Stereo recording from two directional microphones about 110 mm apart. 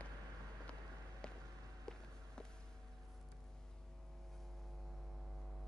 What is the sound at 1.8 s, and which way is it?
Walk, 5° left (ahead or behind).